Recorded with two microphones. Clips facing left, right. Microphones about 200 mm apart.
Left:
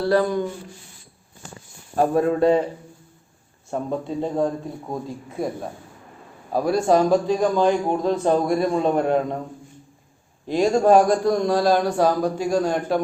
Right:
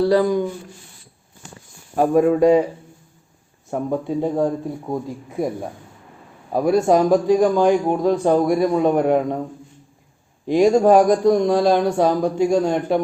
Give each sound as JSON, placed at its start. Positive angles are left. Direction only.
{"t": 0.0, "sound": "a man's voice", "side_deg": -15}
{"t": 2.0, "sound": "a man's voice", "side_deg": -10}
{"t": 3.7, "sound": "a man's voice", "side_deg": -15}
{"t": 10.4, "sound": "a man's voice", "side_deg": -15}